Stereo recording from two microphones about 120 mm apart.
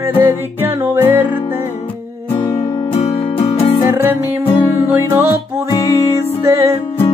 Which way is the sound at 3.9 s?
15° right (ahead or behind).